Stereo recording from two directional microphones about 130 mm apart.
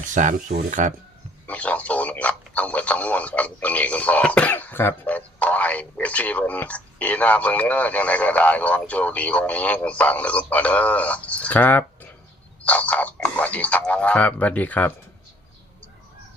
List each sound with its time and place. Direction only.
0.0 s speech: 75° right (ahead or behind)
1.5 s speech: 10° left (ahead or behind)